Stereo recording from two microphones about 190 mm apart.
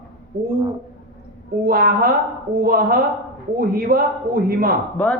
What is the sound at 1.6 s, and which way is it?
A man's voice, 50° right (ahead or behind).